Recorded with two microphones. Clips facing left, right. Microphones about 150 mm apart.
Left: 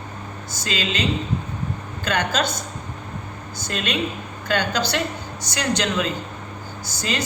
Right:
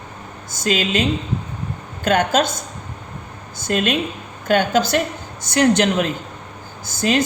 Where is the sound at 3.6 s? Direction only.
50° right (ahead or behind).